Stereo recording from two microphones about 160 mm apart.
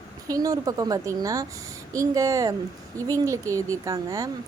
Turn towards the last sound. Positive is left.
turn(degrees=-20)  # may be behind; listen again after turning